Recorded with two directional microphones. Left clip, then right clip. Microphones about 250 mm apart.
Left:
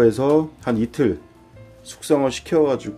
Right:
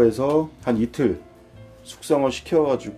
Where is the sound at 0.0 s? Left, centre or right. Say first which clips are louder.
Left 2 dB; left.